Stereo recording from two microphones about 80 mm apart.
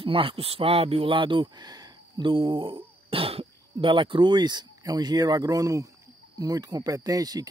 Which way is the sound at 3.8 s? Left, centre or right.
Right.